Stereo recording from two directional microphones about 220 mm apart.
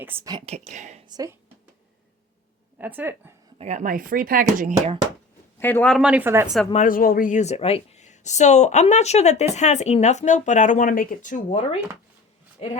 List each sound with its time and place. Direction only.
0.0 s speech: 10° right (ahead or behind)
0.3 s speech: 30° right (ahead or behind)
1.0 s speech: 15° right (ahead or behind)
2.7 s a woman's voice: 10° right (ahead or behind)
3.6 s speech: 35° right (ahead or behind)
5.5 s speech: 10° left (ahead or behind)
6.7 s speech: 40° left (ahead or behind)